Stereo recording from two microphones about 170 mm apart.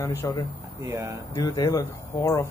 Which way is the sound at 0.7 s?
15° right (ahead or behind).